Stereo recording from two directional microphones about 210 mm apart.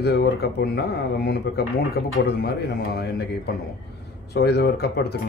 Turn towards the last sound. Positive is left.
turn(degrees=50)  # may be behind; listen again after turning